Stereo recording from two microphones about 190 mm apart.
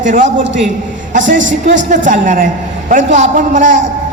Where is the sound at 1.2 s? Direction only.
75° right (ahead or behind).